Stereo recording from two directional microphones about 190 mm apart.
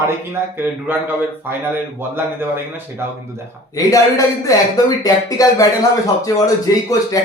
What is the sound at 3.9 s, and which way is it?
Speech, 15° left (ahead or behind).